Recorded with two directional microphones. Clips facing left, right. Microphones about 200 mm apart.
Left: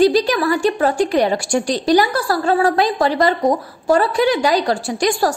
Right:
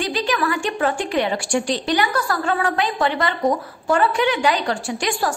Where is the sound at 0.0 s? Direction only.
40° left (ahead or behind).